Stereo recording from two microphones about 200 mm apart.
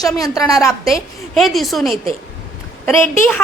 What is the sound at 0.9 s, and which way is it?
A woman's voice, centre (ahead or behind).